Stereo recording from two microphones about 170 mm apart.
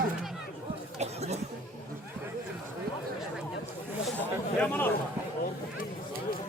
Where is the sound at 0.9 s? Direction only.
40° right (ahead or behind).